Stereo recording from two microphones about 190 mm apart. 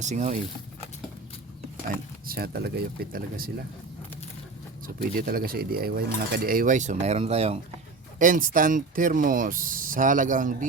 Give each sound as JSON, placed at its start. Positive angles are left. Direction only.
{"t": 0.0, "sound": "speech", "side_deg": -40}
{"t": 2.2, "sound": "speech", "side_deg": -55}
{"t": 4.9, "sound": "speech", "side_deg": -50}
{"t": 8.2, "sound": "speech", "side_deg": -45}